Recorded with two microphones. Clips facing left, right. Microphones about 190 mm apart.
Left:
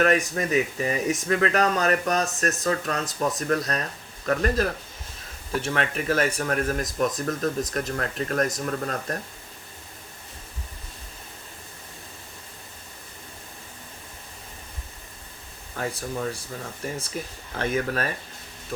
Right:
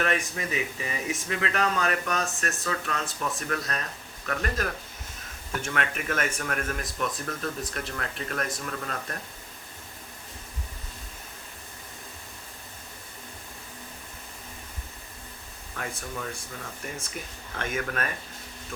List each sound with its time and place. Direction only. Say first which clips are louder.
0.0 s speech: left 7 dB; 40° left (ahead or behind)
5.5 s speech: left 4 dB; 30° left (ahead or behind)
15.7 s speech: left 6 dB; 35° left (ahead or behind)